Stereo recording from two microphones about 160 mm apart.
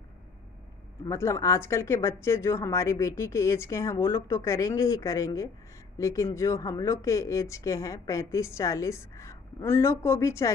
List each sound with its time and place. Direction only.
1.0 s speech: 20° left (ahead or behind)